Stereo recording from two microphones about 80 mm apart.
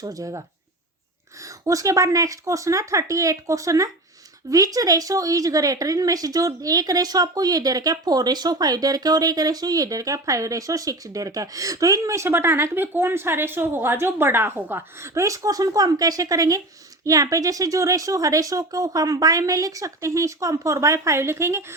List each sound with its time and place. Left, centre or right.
0.0 s speech: right
1.6 s speech: right